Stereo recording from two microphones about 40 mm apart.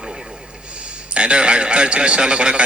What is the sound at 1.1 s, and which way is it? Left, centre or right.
A man's voice, right.